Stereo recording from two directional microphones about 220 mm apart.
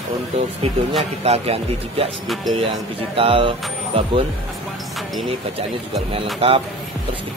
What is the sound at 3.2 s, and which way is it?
Speech, 25° right (ahead or behind).